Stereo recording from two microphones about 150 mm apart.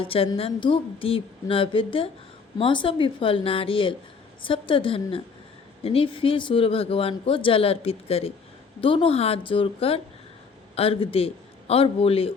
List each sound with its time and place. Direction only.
0.0 s speech: 40° left (ahead or behind)